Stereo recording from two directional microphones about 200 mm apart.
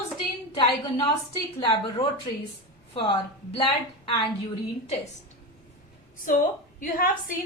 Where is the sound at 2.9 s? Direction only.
25° left (ahead or behind).